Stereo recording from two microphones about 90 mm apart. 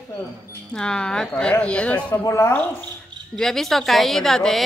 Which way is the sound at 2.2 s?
35° left (ahead or behind).